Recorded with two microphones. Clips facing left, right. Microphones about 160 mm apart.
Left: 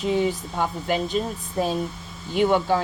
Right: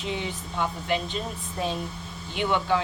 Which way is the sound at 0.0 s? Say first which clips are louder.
Left 9 dB; 45° left (ahead or behind).